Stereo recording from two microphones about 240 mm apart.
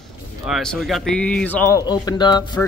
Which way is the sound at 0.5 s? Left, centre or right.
Centre.